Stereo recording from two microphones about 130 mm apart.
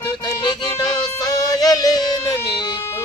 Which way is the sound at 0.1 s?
35° left (ahead or behind).